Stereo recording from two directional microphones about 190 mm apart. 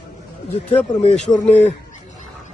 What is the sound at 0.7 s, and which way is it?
Speech, 30° left (ahead or behind).